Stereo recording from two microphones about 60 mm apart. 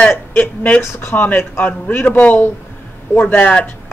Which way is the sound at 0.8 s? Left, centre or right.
Left.